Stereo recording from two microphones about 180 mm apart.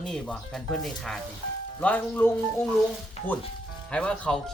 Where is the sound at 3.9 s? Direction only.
5° left (ahead or behind).